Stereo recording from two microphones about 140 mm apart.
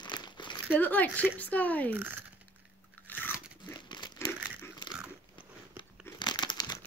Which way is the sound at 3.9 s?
30° left (ahead or behind).